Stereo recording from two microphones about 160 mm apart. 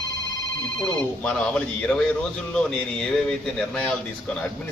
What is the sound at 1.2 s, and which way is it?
Speech, 5° left (ahead or behind).